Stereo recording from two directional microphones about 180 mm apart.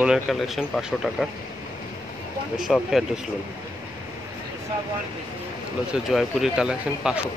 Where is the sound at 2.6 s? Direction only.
5° right (ahead or behind).